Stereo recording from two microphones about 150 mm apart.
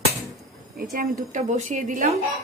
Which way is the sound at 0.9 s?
65° right (ahead or behind).